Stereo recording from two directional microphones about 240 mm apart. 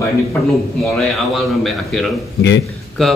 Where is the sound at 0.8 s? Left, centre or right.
Centre.